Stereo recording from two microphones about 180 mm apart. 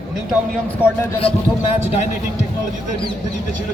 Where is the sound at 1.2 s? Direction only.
30° left (ahead or behind).